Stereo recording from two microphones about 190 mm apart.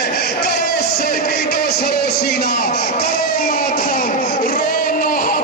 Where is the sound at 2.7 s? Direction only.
35° left (ahead or behind).